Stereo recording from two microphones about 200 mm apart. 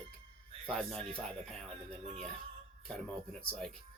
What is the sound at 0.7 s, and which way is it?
Speech, 5° left (ahead or behind).